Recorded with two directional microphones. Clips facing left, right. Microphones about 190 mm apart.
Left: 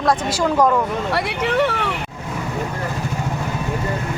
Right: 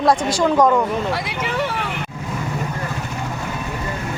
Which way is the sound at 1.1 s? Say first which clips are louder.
Left 4 dB; 65° left (ahead or behind).